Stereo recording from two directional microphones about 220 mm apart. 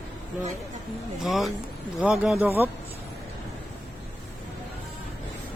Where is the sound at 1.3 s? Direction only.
Centre (ahead or behind).